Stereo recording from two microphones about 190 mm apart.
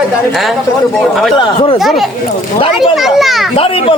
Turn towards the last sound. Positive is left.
turn(degrees=30)  # may be behind; listen again after turning